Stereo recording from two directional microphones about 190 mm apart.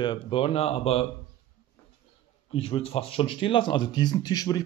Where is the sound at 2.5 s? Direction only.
30° left (ahead or behind).